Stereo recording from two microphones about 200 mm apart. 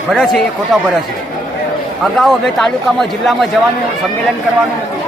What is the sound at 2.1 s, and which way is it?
Speech, centre (ahead or behind).